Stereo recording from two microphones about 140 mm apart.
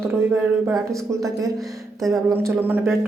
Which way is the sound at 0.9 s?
25° right (ahead or behind).